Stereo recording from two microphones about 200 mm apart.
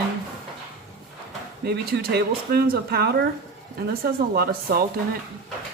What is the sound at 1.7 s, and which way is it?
Speech, 50° right (ahead or behind).